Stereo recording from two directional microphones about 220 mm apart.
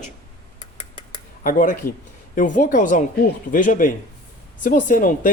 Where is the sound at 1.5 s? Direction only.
40° left (ahead or behind).